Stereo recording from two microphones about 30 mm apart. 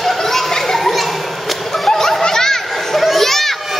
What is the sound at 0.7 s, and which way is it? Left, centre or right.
Children playing, centre.